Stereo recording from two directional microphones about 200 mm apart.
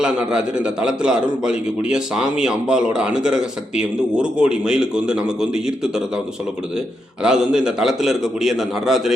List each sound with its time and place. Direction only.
0.0 s a man's voice: 5° right (ahead or behind)
7.2 s a man's voice: 5° right (ahead or behind)